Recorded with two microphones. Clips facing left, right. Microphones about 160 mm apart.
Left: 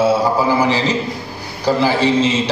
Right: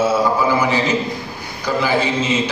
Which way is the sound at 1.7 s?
35° left (ahead or behind).